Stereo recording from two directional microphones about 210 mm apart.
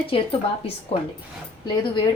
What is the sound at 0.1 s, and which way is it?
Speech, 25° left (ahead or behind).